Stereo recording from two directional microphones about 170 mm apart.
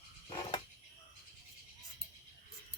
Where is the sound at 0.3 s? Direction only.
30° left (ahead or behind).